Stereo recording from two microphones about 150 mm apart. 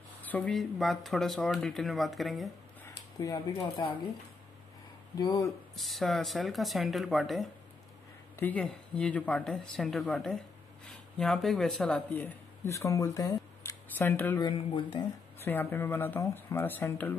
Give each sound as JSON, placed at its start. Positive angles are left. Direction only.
{"t": 0.2, "sound": "speech", "side_deg": 10}
{"t": 2.8, "sound": "a sound", "side_deg": 25}
{"t": 5.1, "sound": "speech", "side_deg": 25}
{"t": 5.8, "sound": "speech", "side_deg": 0}
{"t": 8.4, "sound": "speech", "side_deg": 10}
{"t": 14.4, "sound": "speech", "side_deg": 30}
{"t": 15.3, "sound": "speech", "side_deg": 15}